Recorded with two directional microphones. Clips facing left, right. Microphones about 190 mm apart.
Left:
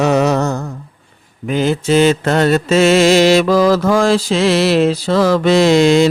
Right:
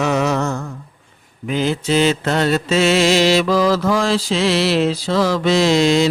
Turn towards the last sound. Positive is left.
turn(degrees=55)  # may be behind; listen again after turning